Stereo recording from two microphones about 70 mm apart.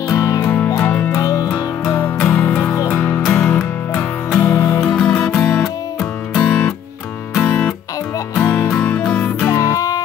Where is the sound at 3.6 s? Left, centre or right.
Left.